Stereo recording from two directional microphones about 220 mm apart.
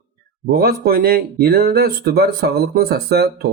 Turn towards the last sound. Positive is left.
turn(degrees=-45)  # may be behind; listen again after turning